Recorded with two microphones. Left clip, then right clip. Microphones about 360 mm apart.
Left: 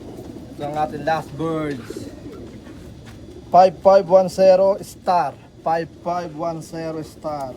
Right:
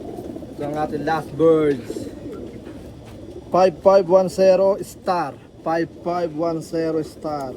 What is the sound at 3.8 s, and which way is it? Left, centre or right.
Speech, left.